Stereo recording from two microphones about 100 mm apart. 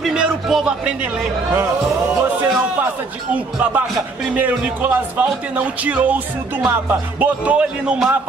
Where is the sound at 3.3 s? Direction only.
15° right (ahead or behind).